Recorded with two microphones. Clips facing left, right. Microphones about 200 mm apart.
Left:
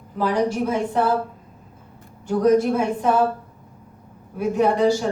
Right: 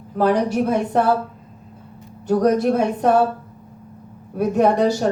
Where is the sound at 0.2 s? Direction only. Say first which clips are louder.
Right 3 dB; 60° right (ahead or behind).